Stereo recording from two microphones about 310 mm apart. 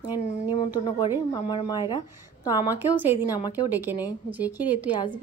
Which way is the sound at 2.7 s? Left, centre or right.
Centre.